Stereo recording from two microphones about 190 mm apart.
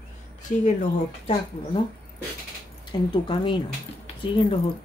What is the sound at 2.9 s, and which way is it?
Speech, 25° left (ahead or behind).